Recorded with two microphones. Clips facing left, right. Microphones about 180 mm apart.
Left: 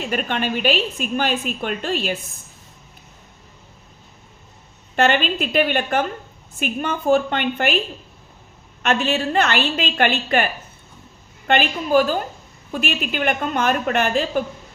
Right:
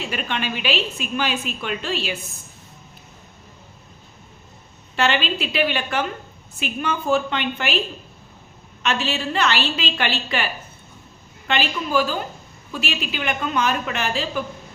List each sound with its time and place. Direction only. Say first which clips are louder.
0.0 s a woman's voice: left 4 dB; 45° left (ahead or behind)
4.9 s a woman's voice: left 3 dB; 50° left (ahead or behind)
8.8 s a woman's voice: left 4 dB; 50° left (ahead or behind)